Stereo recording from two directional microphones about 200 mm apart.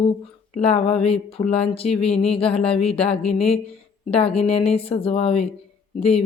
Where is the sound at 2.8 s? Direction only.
Centre (ahead or behind).